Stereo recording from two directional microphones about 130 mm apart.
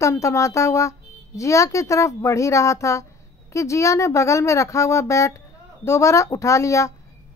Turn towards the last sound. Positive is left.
turn(degrees=25)  # may be behind; listen again after turning